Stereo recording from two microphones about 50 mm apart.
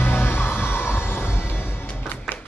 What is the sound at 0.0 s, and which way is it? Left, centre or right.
Music, left.